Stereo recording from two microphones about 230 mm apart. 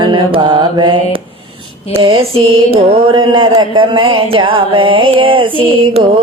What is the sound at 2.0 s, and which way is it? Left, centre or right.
Music, right.